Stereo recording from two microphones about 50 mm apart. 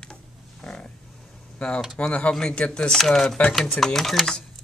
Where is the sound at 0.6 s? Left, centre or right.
Centre.